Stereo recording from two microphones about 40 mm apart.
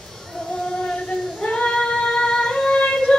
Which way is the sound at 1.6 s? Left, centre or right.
Left.